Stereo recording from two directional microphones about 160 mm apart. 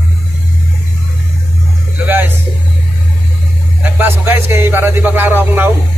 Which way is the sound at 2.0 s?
10° right (ahead or behind).